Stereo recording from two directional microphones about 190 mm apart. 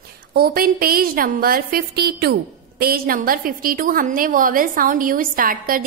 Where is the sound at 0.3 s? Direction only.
50° right (ahead or behind).